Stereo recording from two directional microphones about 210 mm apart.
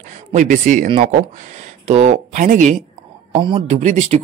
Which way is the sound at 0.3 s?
35° right (ahead or behind).